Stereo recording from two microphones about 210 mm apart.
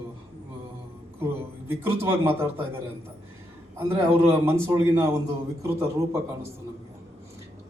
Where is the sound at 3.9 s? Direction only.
10° right (ahead or behind).